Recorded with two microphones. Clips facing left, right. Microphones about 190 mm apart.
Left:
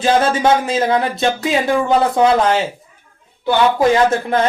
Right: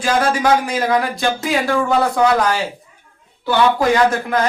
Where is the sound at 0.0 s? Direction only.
25° left (ahead or behind).